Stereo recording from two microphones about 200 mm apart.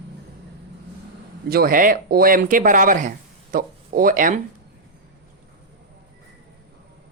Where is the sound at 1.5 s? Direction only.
50° right (ahead or behind).